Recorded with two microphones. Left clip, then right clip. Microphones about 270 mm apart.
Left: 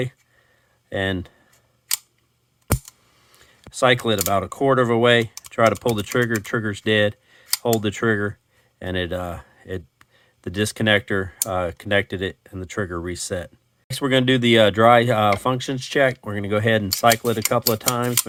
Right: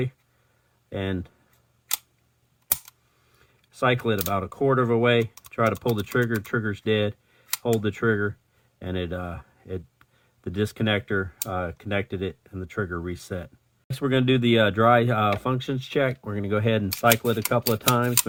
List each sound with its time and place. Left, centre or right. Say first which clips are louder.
0.9 s speech: left 7 dB; left
3.7 s speech: left 5 dB; left